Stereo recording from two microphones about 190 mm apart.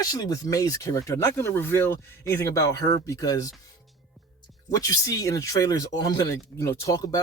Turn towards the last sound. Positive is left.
turn(degrees=20)  # may be behind; listen again after turning